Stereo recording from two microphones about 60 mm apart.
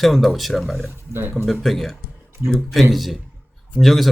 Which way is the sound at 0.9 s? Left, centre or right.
Right.